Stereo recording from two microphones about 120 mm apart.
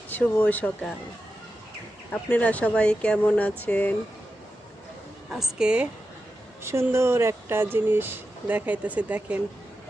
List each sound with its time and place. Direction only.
0.1 s speech: 15° left (ahead or behind)
2.1 s speech: 15° left (ahead or behind)
5.3 s a woman's voice: 5° right (ahead or behind)
6.6 s speech: 20° right (ahead or behind)